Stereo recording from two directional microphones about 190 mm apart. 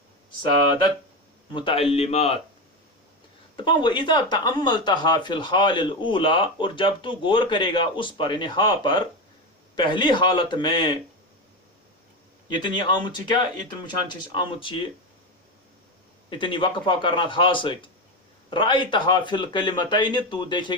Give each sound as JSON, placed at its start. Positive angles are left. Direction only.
{"t": 1.5, "sound": "a man's voice", "side_deg": 30}
{"t": 3.6, "sound": "speech", "side_deg": 25}
{"t": 12.5, "sound": "speech", "side_deg": 25}
{"t": 16.3, "sound": "speech", "side_deg": 25}